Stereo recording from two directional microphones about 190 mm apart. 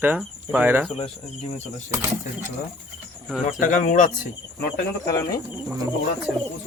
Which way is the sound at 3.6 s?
40° left (ahead or behind).